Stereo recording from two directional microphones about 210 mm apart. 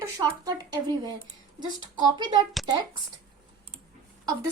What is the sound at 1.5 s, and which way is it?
Speech, 20° right (ahead or behind).